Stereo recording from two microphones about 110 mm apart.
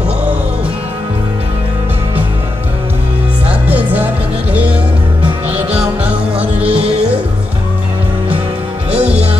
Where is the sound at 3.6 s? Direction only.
15° right (ahead or behind).